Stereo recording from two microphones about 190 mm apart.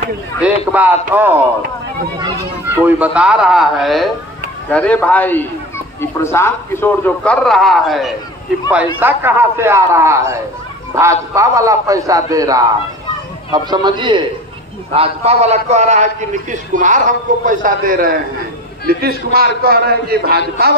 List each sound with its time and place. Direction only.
0.4 s a man's voice: 5° right (ahead or behind)
3.0 s a man's voice: 5° right (ahead or behind)
8.6 s a man's voice: 10° right (ahead or behind); by 20.7 s 55° right (ahead or behind)